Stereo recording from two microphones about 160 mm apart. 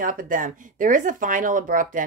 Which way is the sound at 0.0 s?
60° right (ahead or behind).